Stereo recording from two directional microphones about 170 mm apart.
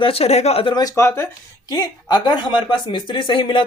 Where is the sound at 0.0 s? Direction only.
35° left (ahead or behind).